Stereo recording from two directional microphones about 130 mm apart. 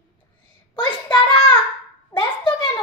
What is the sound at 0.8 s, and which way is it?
Child singing, 40° left (ahead or behind).